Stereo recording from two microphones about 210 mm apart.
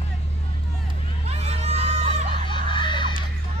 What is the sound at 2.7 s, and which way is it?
Music, 20° left (ahead or behind).